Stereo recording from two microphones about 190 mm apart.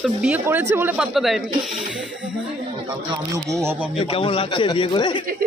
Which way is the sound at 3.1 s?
15° right (ahead or behind).